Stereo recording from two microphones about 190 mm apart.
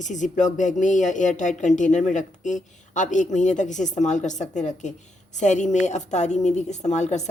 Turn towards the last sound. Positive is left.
turn(degrees=35)  # may be behind; listen again after turning